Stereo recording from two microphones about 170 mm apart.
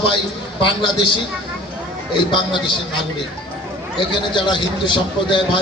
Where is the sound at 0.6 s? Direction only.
30° left (ahead or behind).